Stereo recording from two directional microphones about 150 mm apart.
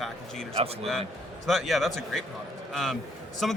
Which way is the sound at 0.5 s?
40° right (ahead or behind).